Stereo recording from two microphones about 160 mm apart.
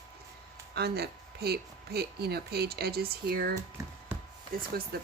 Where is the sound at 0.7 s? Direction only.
85° right.